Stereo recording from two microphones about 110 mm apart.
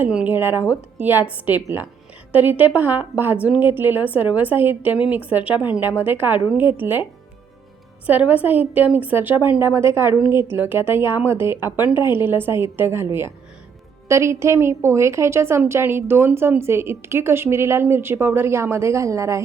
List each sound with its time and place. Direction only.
0.0 s a woman's voice: 10° right (ahead or behind)
8.0 s a woman's voice: 15° right (ahead or behind)